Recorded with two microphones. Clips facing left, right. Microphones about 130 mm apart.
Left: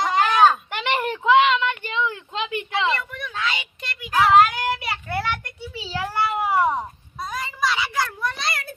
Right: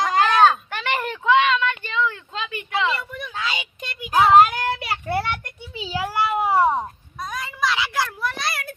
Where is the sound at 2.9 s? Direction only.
15° right (ahead or behind).